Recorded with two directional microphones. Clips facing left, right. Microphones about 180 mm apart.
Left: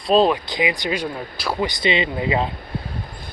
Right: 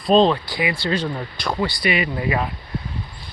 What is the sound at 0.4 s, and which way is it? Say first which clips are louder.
Speech: left 1 dB; 20° left (ahead or behind).